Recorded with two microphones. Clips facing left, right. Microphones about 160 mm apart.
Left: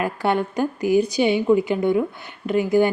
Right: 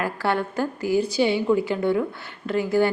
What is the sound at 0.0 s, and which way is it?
A woman's voice, 20° left (ahead or behind).